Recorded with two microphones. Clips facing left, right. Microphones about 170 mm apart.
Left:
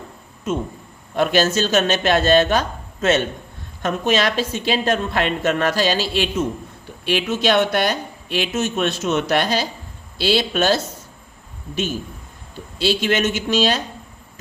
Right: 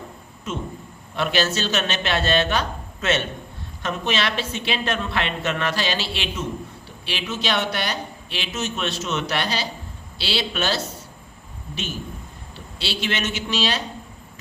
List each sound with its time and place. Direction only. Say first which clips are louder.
1.1 s a woman's voice: left 5 dB; 45° left (ahead or behind)
12.8 s speech: left 8 dB; 45° left (ahead or behind)